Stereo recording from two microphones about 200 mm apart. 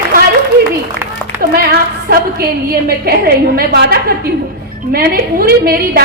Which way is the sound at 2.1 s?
50° right (ahead or behind).